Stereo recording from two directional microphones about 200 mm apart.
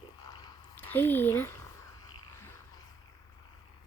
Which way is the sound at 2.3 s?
10° left (ahead or behind).